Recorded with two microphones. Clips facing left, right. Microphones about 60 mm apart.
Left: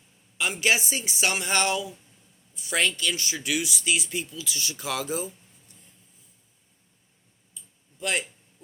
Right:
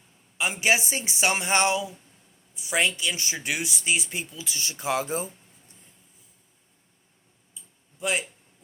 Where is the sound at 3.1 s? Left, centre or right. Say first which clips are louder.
Left 1 dB; right.